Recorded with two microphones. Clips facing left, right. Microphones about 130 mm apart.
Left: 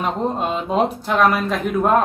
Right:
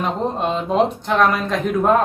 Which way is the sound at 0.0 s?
5° left (ahead or behind).